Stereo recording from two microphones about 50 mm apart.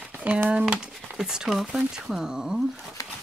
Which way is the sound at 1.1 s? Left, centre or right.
Centre.